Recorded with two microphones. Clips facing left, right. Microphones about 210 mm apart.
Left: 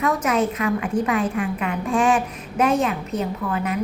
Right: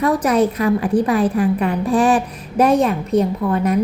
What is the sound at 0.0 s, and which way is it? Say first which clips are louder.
A woman's voice: right 5 dB; 35° right (ahead or behind).